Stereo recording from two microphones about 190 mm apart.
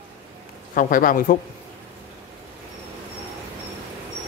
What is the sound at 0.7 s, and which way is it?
Speech, 45° left (ahead or behind).